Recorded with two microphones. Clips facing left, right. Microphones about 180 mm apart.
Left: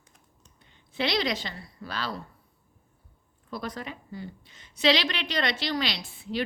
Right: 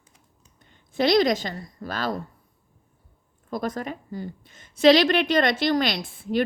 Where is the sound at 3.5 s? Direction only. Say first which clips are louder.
Right 7 dB; 45° right (ahead or behind).